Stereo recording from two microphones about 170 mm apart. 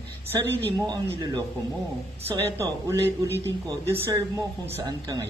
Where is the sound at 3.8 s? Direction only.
15° right (ahead or behind).